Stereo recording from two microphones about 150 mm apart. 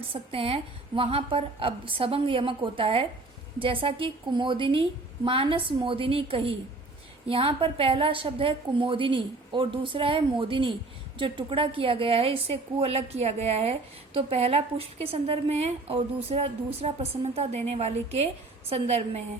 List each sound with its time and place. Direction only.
0.1 s a woman's voice: 40° right (ahead or behind)